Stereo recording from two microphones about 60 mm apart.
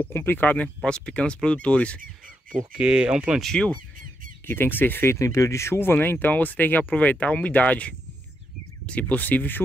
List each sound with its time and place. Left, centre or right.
0.1 s speech: left
0.8 s speech: centre
2.7 s speech: centre
4.5 s speech: left
5.1 s speech: left